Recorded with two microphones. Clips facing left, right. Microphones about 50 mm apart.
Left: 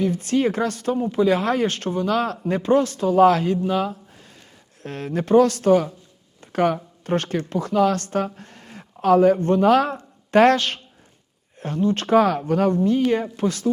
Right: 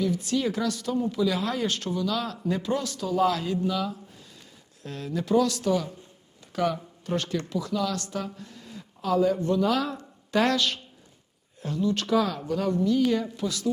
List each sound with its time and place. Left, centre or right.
0.0 s speech: left